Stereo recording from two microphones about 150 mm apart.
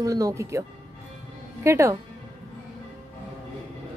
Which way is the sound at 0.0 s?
20° right (ahead or behind).